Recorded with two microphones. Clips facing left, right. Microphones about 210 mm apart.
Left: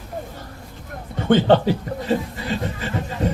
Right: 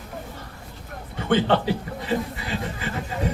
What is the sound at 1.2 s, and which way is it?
Speech, 40° left (ahead or behind).